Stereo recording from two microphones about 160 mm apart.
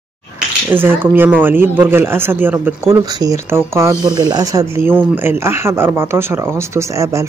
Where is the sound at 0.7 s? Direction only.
10° right (ahead or behind).